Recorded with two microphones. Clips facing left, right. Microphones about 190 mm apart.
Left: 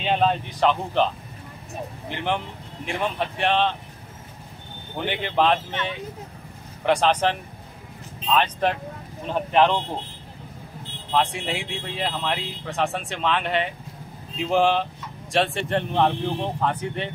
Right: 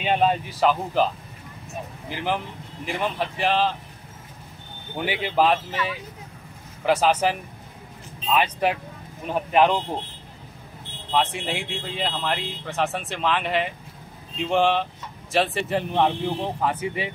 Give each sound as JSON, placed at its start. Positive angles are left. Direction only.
{"t": 0.0, "sound": "speech", "side_deg": -10}
{"t": 4.9, "sound": "speech", "side_deg": -5}
{"t": 11.1, "sound": "speech", "side_deg": 0}